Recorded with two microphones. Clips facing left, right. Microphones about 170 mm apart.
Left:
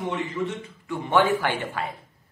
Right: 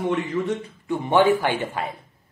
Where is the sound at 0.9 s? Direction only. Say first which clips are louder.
Right 4 dB; 20° right (ahead or behind).